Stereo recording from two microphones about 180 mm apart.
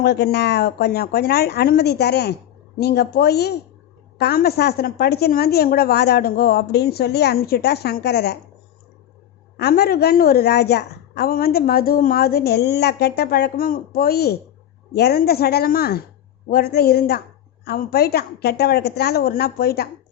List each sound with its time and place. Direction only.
0.0 s a woman's voice: 65° left (ahead or behind)
9.6 s a woman's voice: 60° left (ahead or behind)